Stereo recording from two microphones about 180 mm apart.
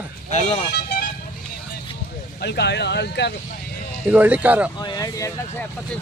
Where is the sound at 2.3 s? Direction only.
70° left (ahead or behind).